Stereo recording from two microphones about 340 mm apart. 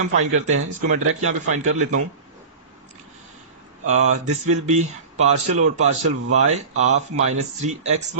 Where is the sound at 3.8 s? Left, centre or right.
Right.